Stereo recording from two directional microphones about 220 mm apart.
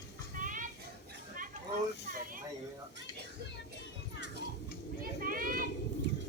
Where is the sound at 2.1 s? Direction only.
40° right (ahead or behind).